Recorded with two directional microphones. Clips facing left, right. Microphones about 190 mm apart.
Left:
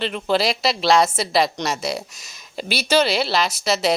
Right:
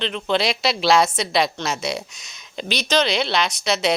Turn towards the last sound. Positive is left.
turn(degrees=0)  # may be behind; listen again after turning